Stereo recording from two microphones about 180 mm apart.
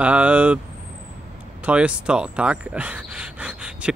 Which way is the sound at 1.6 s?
5° right (ahead or behind).